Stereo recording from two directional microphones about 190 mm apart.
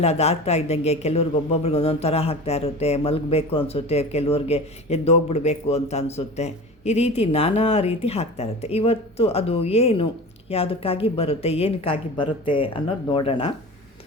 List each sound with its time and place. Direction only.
0.0 s a man's voice: 35° left (ahead or behind)